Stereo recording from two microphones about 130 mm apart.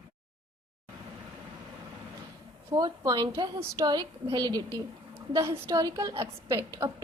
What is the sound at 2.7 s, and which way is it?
A woman's voice, 30° right (ahead or behind).